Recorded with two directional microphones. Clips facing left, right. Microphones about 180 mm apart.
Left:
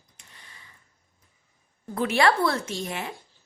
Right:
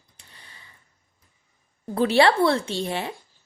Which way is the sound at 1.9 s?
30° right (ahead or behind).